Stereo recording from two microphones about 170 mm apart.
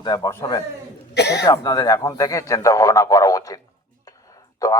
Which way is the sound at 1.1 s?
80° left.